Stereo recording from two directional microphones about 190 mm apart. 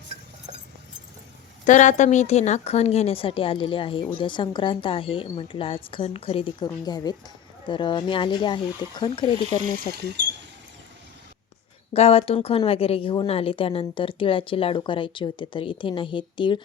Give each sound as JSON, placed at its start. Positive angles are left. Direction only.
{"t": 1.6, "sound": "a woman's voice", "side_deg": 40}
{"t": 9.9, "sound": "speech", "side_deg": -65}
{"t": 11.9, "sound": "a woman's voice", "side_deg": 30}